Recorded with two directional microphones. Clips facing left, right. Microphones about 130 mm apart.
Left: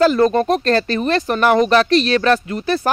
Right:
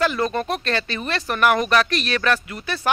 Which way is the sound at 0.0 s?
35° left (ahead or behind).